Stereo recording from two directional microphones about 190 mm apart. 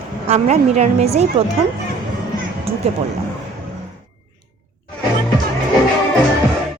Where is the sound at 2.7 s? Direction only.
30° right (ahead or behind).